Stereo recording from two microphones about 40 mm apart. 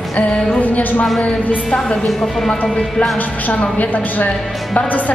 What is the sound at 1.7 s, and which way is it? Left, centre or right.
Speech, centre.